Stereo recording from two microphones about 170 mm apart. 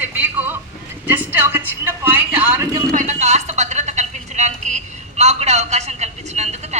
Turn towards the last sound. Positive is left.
turn(degrees=-40)  # may be behind; listen again after turning